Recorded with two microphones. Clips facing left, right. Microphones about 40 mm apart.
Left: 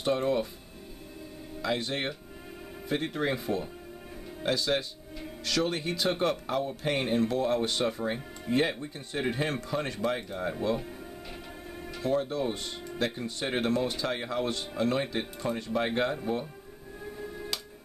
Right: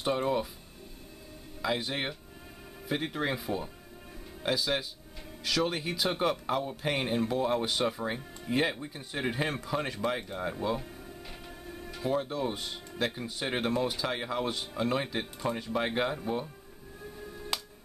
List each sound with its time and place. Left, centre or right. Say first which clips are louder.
0.0 s speech: left 2 dB; centre
1.6 s speech: left 1 dB; centre
11.9 s speech: left 2 dB; centre
17.0 s music: left 4 dB; centre